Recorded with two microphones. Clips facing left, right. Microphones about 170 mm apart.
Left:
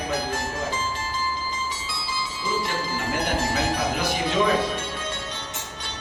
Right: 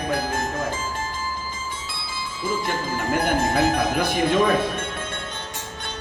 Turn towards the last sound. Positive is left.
turn(degrees=-55)  # may be behind; listen again after turning